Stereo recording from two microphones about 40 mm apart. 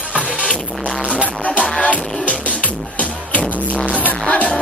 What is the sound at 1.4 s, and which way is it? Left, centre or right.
Music, left.